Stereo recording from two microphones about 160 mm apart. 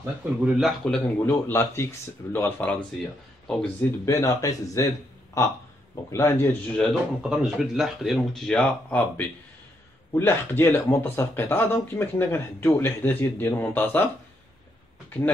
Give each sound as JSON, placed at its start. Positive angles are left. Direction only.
{"t": 0.0, "sound": "speech", "side_deg": -5}
{"t": 1.3, "sound": "speech", "side_deg": 15}
{"t": 4.0, "sound": "a man's voice", "side_deg": 20}
{"t": 6.8, "sound": "speech", "side_deg": 0}